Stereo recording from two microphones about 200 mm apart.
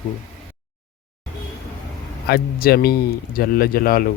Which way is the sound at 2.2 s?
50° left (ahead or behind).